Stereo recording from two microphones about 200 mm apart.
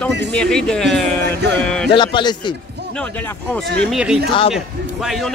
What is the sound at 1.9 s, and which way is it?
Speech, 25° left (ahead or behind).